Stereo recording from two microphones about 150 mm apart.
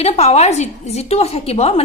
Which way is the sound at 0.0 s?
45° left (ahead or behind).